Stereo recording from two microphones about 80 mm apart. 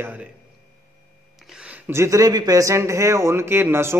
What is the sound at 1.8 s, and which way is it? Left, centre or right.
A man's voice, right.